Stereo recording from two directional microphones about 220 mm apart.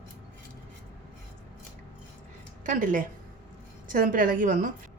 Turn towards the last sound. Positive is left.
turn(degrees=-40)  # may be behind; listen again after turning